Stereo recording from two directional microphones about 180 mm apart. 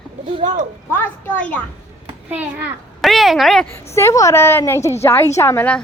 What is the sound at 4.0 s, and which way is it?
A woman's voice, 15° left (ahead or behind).